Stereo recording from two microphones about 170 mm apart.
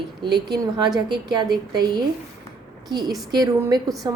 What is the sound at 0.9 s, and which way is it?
A woman's voice, 25° right (ahead or behind).